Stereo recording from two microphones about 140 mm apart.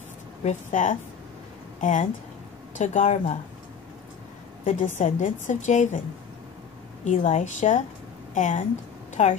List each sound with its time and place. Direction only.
0.4 s a woman's voice: 60° left (ahead or behind)
4.6 s a woman's voice: 60° left (ahead or behind)
7.1 s a woman's voice: 60° left (ahead or behind)